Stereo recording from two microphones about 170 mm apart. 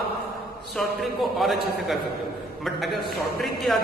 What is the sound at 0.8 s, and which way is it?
Speech, centre (ahead or behind).